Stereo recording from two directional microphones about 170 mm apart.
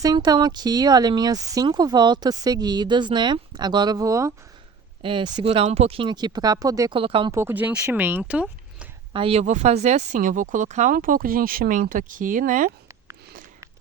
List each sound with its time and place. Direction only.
0.0 s speech: 25° right (ahead or behind)
7.0 s speech: 30° right (ahead or behind)
7.3 s speech: 15° right (ahead or behind)
9.1 s speech: 35° right (ahead or behind); by 12.7 s 50° right (ahead or behind)